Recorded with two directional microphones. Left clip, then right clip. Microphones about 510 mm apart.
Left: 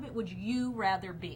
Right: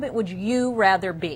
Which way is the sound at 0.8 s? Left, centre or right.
Right.